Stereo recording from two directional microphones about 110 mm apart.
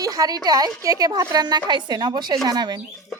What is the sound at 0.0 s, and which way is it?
A woman's voice, 35° right (ahead or behind).